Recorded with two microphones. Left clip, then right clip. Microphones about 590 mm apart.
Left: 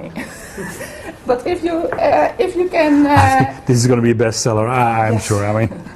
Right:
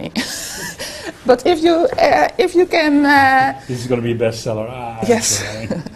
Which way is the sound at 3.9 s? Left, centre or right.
Left.